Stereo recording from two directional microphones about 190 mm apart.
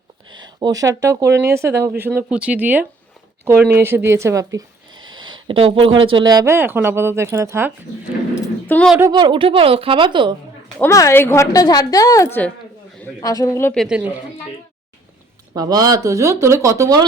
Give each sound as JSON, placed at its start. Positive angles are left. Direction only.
{"t": 0.3, "sound": "a sound", "side_deg": -20}
{"t": 1.0, "sound": "speech", "side_deg": -15}
{"t": 8.6, "sound": "speech", "side_deg": 5}
{"t": 9.0, "sound": "a woman's voice", "side_deg": -20}
{"t": 10.8, "sound": "a woman's voice", "side_deg": 15}
{"t": 13.7, "sound": "a woman's voice", "side_deg": -5}
{"t": 15.5, "sound": "speech", "side_deg": -20}